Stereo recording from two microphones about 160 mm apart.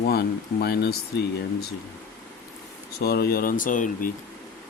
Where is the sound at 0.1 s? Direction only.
85° left.